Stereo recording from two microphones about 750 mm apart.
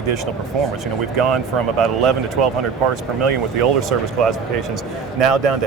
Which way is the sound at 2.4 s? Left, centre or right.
Right.